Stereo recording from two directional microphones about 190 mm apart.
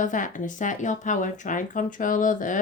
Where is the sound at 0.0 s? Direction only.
45° left (ahead or behind).